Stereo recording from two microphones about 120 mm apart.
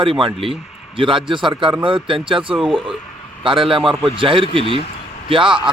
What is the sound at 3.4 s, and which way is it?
Speech, 45° right (ahead or behind).